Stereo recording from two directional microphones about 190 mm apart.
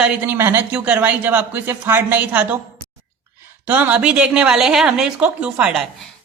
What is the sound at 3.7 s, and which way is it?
A woman's voice, 10° right (ahead or behind).